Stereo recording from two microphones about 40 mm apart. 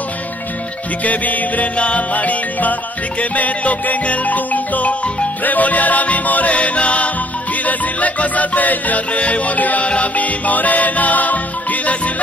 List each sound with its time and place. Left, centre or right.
1.0 s music: left